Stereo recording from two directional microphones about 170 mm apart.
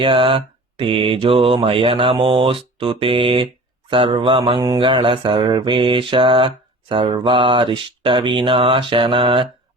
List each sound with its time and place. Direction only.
0.0 s speech: 30° right (ahead or behind)
3.8 s mantra: 30° right (ahead or behind)